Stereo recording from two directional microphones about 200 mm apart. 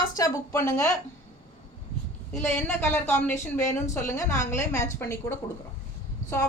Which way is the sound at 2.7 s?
10° left (ahead or behind).